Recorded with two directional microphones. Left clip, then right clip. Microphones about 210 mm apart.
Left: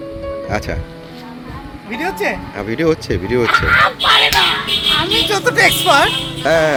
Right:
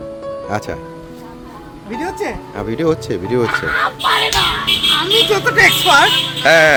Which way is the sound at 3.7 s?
40° left (ahead or behind).